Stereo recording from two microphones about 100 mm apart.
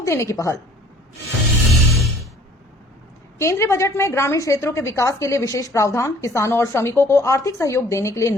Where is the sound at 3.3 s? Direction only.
30° left (ahead or behind).